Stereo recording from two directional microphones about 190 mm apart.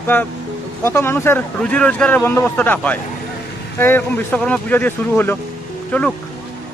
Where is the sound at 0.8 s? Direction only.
15° left (ahead or behind).